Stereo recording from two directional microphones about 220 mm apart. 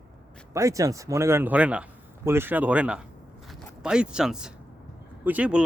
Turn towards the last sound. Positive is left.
turn(degrees=-5)  # may be behind; listen again after turning